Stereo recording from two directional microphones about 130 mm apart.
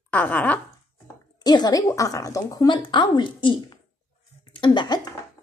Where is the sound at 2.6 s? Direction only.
35° left (ahead or behind).